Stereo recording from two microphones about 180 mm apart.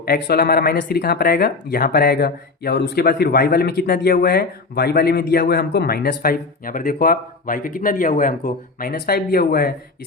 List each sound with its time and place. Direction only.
0.0 s speech: 60° left (ahead or behind)